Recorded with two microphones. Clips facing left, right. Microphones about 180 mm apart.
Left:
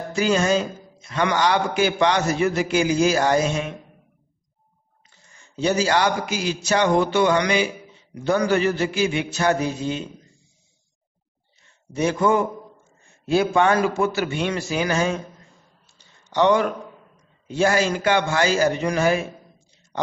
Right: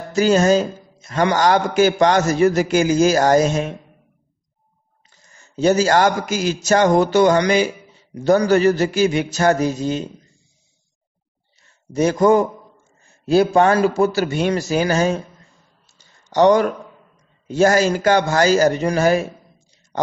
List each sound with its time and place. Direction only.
0.1 s a man's voice: 40° right (ahead or behind)
5.1 s a man's voice: 40° right (ahead or behind)
11.9 s a man's voice: 40° right (ahead or behind)
15.9 s a sound: 40° right (ahead or behind)
17.5 s a man's voice: 40° right (ahead or behind)